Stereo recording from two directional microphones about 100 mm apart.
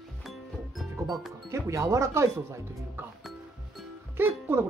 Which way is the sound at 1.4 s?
30° right (ahead or behind).